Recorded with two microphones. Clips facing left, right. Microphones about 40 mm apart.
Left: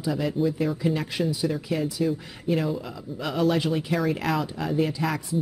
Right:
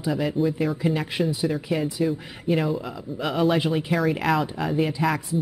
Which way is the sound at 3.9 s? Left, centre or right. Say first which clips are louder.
Right 4 dB; centre.